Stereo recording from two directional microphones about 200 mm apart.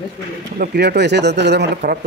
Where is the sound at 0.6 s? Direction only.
55° right (ahead or behind).